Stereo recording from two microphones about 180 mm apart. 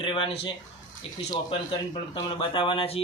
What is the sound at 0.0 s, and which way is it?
Speech, 30° left (ahead or behind).